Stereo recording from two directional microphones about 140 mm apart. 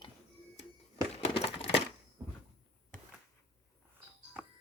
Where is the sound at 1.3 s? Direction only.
45° left (ahead or behind).